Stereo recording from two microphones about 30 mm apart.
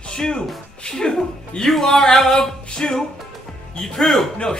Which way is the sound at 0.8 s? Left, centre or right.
Left.